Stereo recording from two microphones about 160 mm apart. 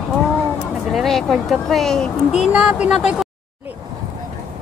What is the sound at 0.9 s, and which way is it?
Speech, centre (ahead or behind).